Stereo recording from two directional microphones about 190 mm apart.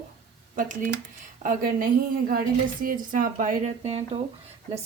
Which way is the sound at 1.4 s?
45° right (ahead or behind).